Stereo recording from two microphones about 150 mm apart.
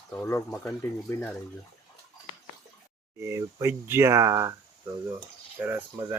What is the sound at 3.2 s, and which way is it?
Speech, 20° right (ahead or behind).